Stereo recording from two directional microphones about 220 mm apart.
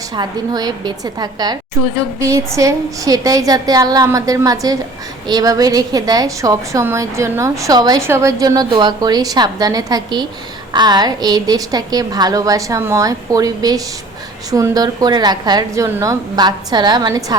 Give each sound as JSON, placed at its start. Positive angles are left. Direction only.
{"t": 0.2, "sound": "a woman's voice", "side_deg": -20}